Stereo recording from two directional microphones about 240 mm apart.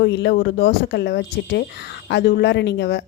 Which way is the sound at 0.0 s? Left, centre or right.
Left.